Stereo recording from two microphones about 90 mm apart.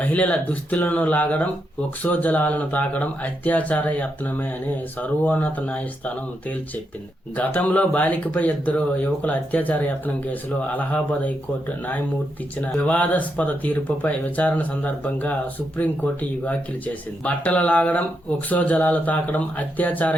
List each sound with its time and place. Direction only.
0.0 s speech: 15° left (ahead or behind)
7.3 s speech: 15° left (ahead or behind)
12.5 s speech: 15° left (ahead or behind)
16.4 s speech: 15° left (ahead or behind)